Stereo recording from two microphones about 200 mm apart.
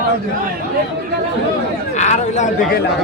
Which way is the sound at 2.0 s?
35° left (ahead or behind).